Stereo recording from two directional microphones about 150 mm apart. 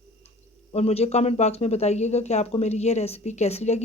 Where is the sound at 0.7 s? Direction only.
45° left (ahead or behind).